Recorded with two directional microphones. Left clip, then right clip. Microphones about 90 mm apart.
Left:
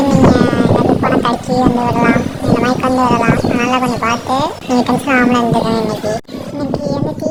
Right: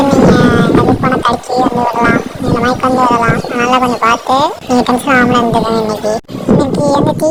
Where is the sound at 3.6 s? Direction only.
40° right (ahead or behind).